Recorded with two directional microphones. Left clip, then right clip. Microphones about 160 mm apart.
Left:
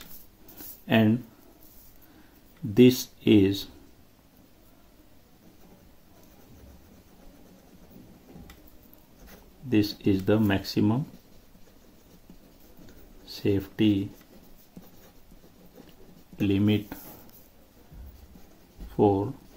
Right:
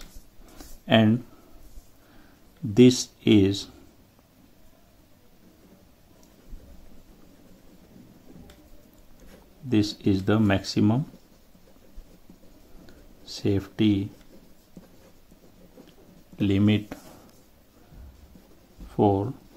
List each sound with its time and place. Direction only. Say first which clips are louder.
0.8 s speech: right 3 dB; 30° right (ahead or behind)
2.7 s speech: right 1 dB; 30° right (ahead or behind)
9.7 s speech: right 1 dB; 30° right (ahead or behind)
13.2 s speech: even; 35° right (ahead or behind)
16.3 s speech: right 1 dB; 35° right (ahead or behind)
18.9 s speech: even; 30° right (ahead or behind)